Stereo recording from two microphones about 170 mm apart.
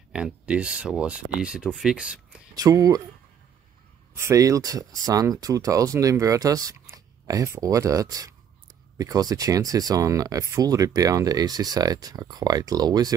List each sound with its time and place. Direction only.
0.1 s speech: 5° right (ahead or behind)
2.5 s speech: 20° right (ahead or behind)
4.2 s speech: 20° right (ahead or behind)